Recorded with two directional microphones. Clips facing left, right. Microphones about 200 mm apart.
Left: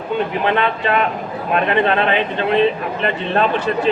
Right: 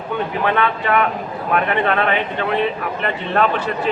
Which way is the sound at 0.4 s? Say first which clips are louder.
Right 1 dB; 25° left (ahead or behind).